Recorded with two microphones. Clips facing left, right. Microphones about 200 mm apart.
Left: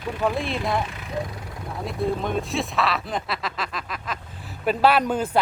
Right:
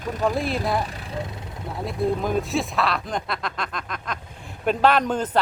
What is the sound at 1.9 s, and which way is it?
Speech, centre (ahead or behind).